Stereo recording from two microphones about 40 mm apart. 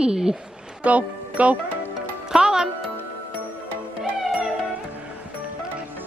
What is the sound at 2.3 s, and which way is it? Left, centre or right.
Music, centre.